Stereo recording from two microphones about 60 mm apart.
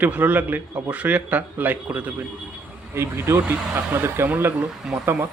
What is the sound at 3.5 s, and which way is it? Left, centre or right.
Speech, right.